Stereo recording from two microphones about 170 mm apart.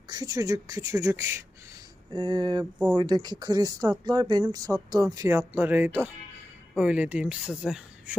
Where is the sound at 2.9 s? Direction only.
25° right (ahead or behind).